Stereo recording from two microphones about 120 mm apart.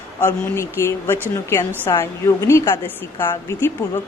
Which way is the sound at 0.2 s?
15° left (ahead or behind).